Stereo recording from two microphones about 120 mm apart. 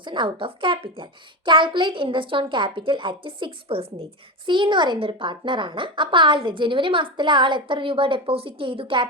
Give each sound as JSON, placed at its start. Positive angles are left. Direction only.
{"t": 0.0, "sound": "a woman's voice", "side_deg": -40}